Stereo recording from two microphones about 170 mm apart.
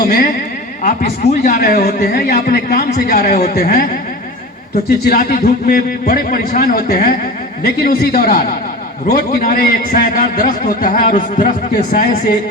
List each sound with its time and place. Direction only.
0.8 s a man's voice: 45° left (ahead or behind)
5.0 s a man's voice: 60° left (ahead or behind)